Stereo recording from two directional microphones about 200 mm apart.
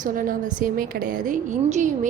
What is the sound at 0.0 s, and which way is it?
A woman's voice, 45° right (ahead or behind).